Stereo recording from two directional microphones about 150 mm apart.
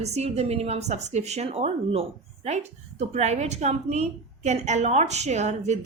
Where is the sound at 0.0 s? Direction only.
45° right (ahead or behind).